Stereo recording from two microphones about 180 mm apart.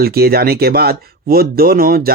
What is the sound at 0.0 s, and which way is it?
Speech, 60° right (ahead or behind).